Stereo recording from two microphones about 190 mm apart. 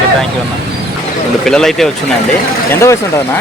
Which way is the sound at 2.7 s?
15° left (ahead or behind).